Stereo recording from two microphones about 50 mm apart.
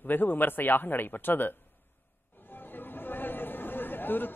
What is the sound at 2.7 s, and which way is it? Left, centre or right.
Chatter, left.